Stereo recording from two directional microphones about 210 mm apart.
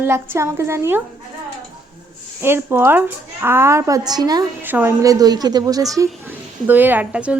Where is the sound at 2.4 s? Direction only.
10° right (ahead or behind).